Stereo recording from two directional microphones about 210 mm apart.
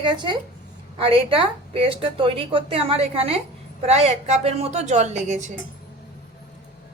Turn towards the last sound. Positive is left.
turn(degrees=-35)  # may be behind; listen again after turning